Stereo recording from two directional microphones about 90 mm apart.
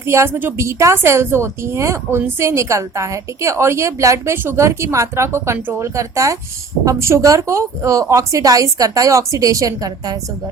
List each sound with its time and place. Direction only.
0.0 s a woman's voice: 30° right (ahead or behind)
0.6 s a woman's voice: 35° right (ahead or behind)